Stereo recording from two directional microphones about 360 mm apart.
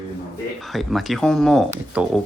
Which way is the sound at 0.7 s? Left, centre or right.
Centre.